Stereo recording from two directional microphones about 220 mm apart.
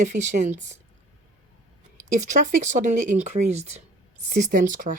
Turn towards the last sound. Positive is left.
turn(degrees=-35)  # may be behind; listen again after turning